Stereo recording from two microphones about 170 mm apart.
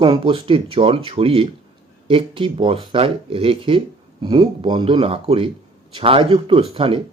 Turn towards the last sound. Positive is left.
turn(degrees=-30)  # may be behind; listen again after turning